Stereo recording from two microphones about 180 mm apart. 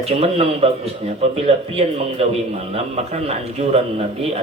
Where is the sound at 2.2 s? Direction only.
35° right (ahead or behind).